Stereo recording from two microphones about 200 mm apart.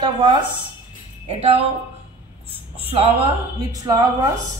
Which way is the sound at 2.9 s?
30° right (ahead or behind).